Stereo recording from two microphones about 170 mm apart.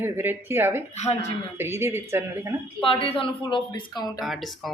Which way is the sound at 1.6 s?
15° right (ahead or behind).